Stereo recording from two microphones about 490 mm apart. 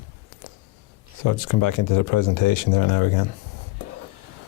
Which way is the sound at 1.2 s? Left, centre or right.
Left.